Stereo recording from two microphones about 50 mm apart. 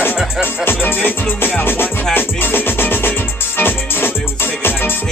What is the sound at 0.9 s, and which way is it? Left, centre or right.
Music, left.